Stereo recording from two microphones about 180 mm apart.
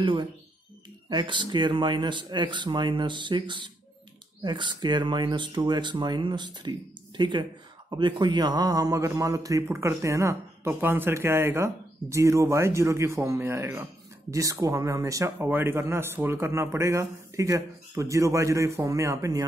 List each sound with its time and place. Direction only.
0.0 s speech: 25° right (ahead or behind)